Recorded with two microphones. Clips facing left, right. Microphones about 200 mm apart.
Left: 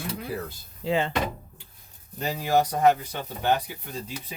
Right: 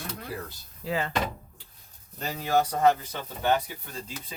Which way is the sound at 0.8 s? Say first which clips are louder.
Left 5 dB; 25° left (ahead or behind).